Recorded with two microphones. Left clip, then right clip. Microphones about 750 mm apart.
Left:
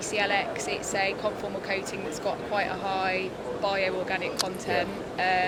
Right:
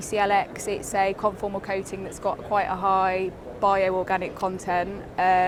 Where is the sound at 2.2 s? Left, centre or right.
Right.